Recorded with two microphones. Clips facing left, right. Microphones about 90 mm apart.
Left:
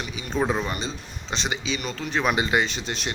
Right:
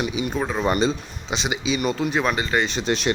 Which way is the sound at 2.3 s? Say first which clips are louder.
Left 1 dB; 20° left (ahead or behind).